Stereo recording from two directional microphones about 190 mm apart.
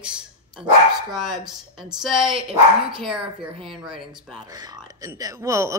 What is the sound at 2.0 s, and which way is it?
Speech, centre (ahead or behind).